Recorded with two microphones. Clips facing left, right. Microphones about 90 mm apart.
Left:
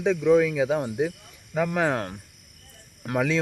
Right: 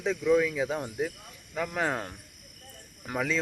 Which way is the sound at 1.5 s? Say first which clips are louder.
Left 6 dB; 85° left.